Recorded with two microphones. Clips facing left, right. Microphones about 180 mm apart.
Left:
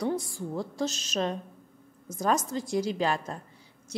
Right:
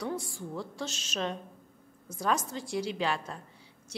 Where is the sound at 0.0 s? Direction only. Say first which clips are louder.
Left 5 dB; 40° left (ahead or behind).